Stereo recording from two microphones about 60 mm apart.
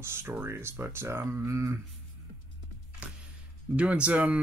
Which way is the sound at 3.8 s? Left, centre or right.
Centre.